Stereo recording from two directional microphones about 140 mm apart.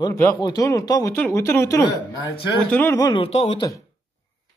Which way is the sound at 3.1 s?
45° left (ahead or behind).